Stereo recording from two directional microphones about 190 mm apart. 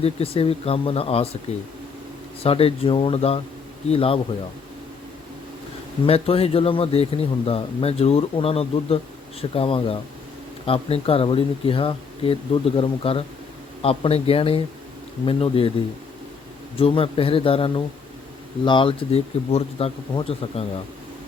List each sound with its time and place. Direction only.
0.0 s speech: 30° left (ahead or behind)
2.4 s speech: 30° left (ahead or behind)
6.1 s speech: 30° left (ahead or behind)
16.7 s speech: 30° left (ahead or behind)